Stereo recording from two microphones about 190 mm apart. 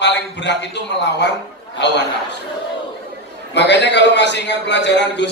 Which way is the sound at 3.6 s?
65° left (ahead or behind).